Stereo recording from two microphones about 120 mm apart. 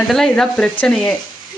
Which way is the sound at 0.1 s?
5° left (ahead or behind).